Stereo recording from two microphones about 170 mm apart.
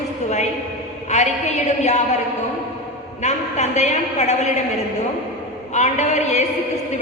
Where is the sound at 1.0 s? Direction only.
40° left (ahead or behind).